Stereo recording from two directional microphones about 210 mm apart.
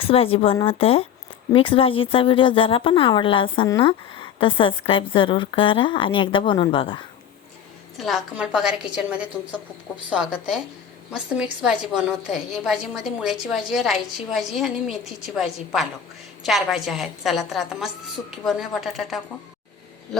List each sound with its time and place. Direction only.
0.0 s speech: 25° left (ahead or behind)
7.9 s a woman's voice: centre (ahead or behind)
11.6 s a woman's voice: 5° right (ahead or behind)